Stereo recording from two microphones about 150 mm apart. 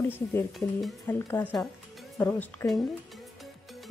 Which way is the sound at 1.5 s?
Centre (ahead or behind).